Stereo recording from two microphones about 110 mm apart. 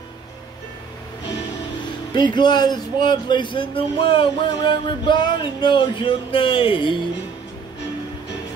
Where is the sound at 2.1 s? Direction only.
45° left (ahead or behind).